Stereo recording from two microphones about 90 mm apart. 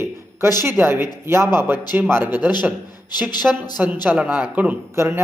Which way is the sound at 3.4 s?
Centre (ahead or behind).